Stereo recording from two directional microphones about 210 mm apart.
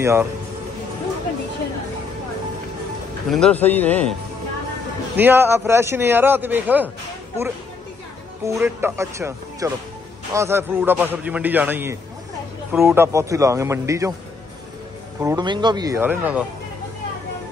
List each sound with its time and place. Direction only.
0.0 s a man's voice: 10° right (ahead or behind)
3.3 s speech: 5° left (ahead or behind)
5.1 s a man's voice: 10° right (ahead or behind)
8.5 s a man's voice: 10° right (ahead or behind)
15.2 s a man's voice: 20° right (ahead or behind)